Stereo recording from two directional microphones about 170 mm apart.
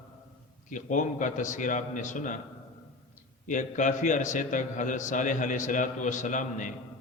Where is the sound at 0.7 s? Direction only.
50° left (ahead or behind).